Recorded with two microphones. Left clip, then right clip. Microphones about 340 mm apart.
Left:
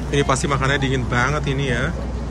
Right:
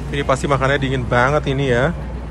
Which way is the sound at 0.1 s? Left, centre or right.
Centre.